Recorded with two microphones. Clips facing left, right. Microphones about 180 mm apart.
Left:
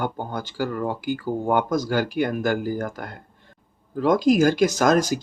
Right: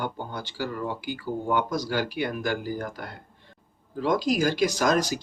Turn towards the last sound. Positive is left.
turn(degrees=50)  # may be behind; listen again after turning